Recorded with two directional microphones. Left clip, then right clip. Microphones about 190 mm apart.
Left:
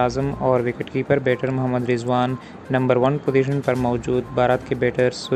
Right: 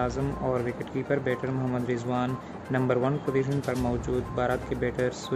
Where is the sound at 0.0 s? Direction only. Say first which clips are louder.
Left 9 dB; 25° left (ahead or behind).